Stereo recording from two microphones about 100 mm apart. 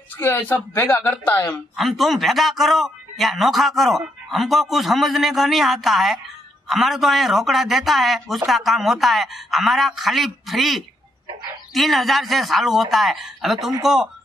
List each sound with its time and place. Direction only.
0.2 s speech: 20° left (ahead or behind)
1.8 s speech: centre (ahead or behind)